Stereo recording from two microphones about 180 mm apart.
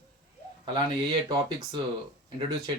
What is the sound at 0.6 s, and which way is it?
Speech, 25° right (ahead or behind).